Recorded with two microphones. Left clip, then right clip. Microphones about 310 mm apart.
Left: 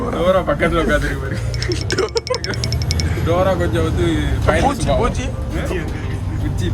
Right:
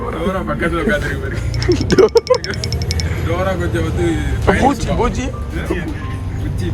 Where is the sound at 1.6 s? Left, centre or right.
Centre.